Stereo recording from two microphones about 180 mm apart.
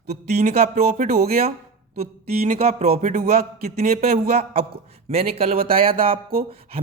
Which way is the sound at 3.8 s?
55° right (ahead or behind).